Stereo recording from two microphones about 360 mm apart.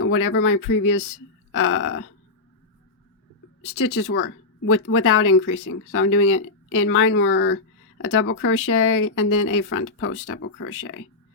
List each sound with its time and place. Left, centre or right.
0.0 s speech: left
3.8 s speech: left